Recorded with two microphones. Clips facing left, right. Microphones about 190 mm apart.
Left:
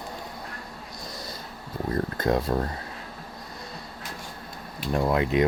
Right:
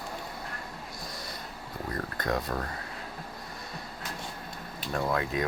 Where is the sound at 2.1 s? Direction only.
25° left (ahead or behind).